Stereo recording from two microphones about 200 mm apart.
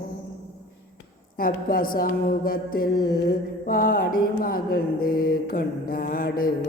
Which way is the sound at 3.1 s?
50° left (ahead or behind).